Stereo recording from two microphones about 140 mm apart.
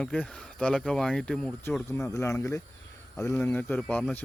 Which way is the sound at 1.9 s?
20° left (ahead or behind).